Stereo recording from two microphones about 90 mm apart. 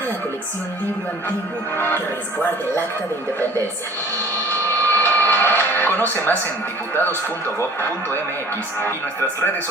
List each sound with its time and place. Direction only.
1.7 s speech: 25° left (ahead or behind)
4.8 s a sound: 20° left (ahead or behind)
6.9 s speech: 25° left (ahead or behind)